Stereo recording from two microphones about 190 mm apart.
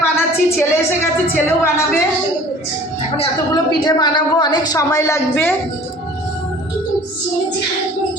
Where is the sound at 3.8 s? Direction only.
20° left (ahead or behind).